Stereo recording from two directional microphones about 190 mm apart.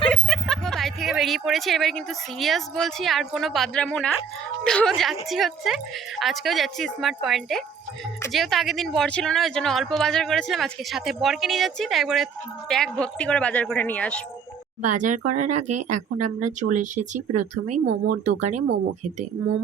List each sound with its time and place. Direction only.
0.1 s speech: centre (ahead or behind)
14.8 s speech: 40° right (ahead or behind)